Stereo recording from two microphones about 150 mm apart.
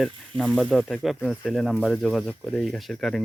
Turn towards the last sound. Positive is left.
turn(degrees=0)  # may be behind; listen again after turning